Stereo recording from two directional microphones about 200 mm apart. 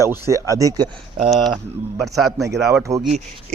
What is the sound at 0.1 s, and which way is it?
Speech, 15° right (ahead or behind).